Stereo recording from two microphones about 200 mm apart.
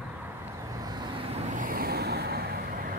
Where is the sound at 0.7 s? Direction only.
20° right (ahead or behind).